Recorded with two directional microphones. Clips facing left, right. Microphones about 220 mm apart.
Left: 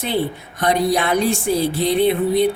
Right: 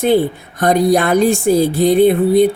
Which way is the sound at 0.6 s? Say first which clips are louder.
Right 5 dB; 45° right (ahead or behind).